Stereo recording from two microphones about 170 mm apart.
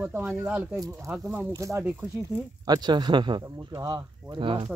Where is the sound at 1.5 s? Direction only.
15° right (ahead or behind).